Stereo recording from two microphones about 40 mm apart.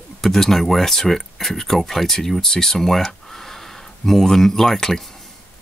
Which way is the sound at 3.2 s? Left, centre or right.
Centre.